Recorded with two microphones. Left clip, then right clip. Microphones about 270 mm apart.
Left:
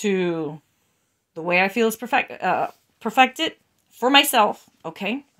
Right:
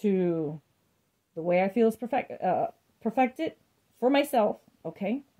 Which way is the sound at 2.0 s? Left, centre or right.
Left.